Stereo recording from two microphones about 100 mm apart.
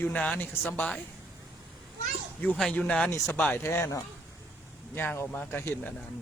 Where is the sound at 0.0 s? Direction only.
15° left (ahead or behind).